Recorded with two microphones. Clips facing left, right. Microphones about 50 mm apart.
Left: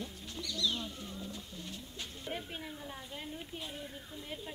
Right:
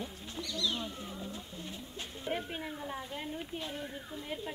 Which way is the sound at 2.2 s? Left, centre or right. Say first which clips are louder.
Right 5 dB; centre.